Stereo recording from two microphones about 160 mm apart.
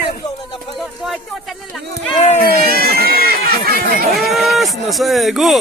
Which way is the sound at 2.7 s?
70° right (ahead or behind).